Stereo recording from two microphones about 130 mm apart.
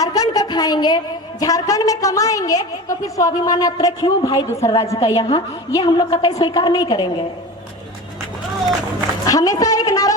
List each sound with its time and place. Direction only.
0.0 s a woman's voice: 30° left (ahead or behind)
9.2 s speech: 25° left (ahead or behind)